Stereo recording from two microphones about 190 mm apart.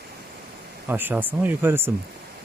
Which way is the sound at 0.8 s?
10° right (ahead or behind).